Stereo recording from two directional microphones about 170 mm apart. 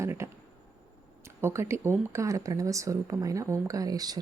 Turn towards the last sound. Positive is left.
turn(degrees=-20)  # may be behind; listen again after turning